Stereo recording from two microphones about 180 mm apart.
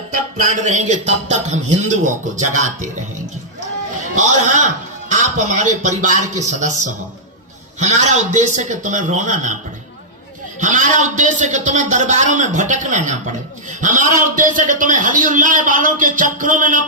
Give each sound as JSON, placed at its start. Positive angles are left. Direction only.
{"t": 0.1, "sound": "a man's voice", "side_deg": -45}
{"t": 4.2, "sound": "a man's voice", "side_deg": -40}
{"t": 10.6, "sound": "a man's voice", "side_deg": -45}